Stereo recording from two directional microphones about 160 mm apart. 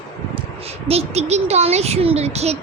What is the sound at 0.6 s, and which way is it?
Speech, 40° right (ahead or behind).